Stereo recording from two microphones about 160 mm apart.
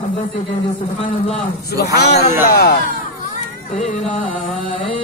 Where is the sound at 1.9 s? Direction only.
85° left.